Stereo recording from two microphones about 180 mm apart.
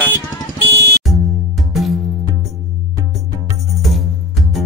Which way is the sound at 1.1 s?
Centre (ahead or behind).